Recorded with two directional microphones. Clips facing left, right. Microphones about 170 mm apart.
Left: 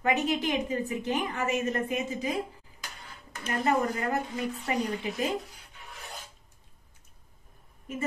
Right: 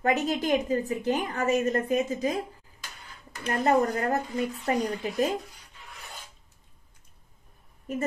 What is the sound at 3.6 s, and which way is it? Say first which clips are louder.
Speech: right 4 dB; 40° right (ahead or behind).